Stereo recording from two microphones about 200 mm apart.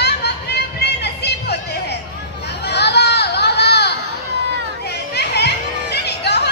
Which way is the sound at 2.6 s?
55° left (ahead or behind).